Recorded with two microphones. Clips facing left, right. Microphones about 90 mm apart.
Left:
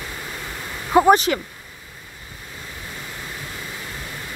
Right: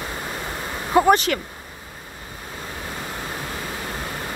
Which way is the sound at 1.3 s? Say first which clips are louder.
Left 2 dB; 15° left (ahead or behind).